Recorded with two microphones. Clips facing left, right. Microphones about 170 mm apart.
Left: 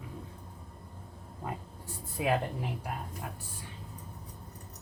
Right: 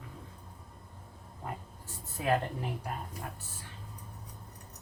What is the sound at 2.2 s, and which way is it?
Speech, 15° left (ahead or behind).